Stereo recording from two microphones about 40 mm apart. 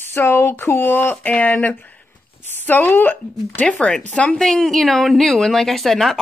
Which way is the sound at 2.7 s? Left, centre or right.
Left.